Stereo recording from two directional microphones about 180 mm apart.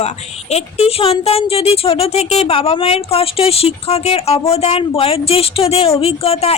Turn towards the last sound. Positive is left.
turn(degrees=35)  # may be behind; listen again after turning